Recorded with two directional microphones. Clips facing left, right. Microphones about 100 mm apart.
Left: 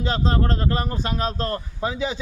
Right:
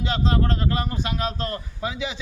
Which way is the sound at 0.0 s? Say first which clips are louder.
Left 1 dB; 40° left (ahead or behind).